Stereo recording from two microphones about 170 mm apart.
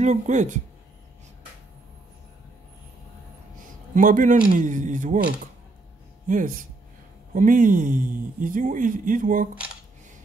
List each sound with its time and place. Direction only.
0.0 s speech: 45° right (ahead or behind)
3.9 s speech: 50° right (ahead or behind)
6.2 s speech: 50° right (ahead or behind)